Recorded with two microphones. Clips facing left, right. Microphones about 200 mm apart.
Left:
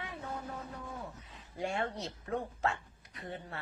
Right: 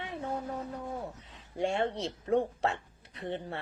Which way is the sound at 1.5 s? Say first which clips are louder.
Right 5 dB; 30° right (ahead or behind).